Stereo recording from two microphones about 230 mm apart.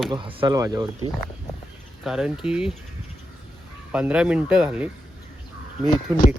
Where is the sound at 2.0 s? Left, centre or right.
Centre.